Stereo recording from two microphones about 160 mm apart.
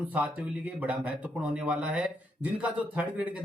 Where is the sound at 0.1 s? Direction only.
10° right (ahead or behind).